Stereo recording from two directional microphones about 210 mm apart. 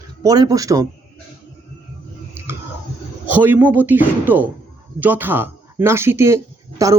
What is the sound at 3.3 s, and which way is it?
Speech, 10° right (ahead or behind).